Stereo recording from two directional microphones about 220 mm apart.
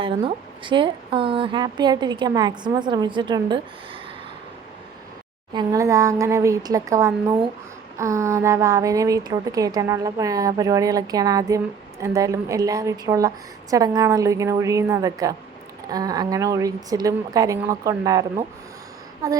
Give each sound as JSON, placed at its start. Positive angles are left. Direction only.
{"t": 0.0, "sound": "a woman's voice", "side_deg": -20}
{"t": 5.5, "sound": "a woman's voice", "side_deg": -15}